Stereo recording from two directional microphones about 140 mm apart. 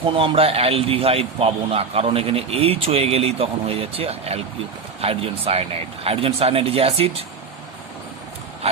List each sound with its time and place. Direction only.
0.0 s speech: 45° right (ahead or behind)